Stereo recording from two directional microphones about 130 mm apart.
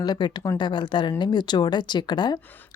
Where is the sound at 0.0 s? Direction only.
35° left (ahead or behind).